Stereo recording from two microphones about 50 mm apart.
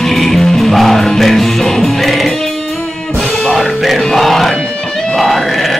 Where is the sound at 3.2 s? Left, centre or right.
Centre.